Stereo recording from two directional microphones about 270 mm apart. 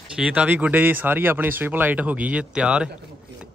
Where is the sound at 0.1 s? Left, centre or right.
Centre.